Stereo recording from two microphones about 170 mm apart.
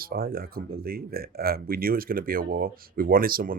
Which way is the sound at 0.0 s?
60° right (ahead or behind).